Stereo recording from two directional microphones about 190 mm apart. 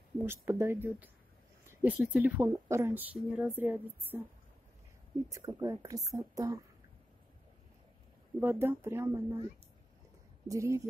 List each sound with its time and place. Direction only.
0.2 s speech: 10° right (ahead or behind)
5.3 s speech: 15° right (ahead or behind)
8.4 s speech: 10° right (ahead or behind)
10.5 s speech: 15° right (ahead or behind)